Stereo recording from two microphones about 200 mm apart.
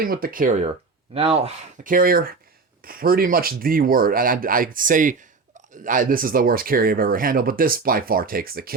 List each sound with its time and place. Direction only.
0.0 s speech: 45° right (ahead or behind)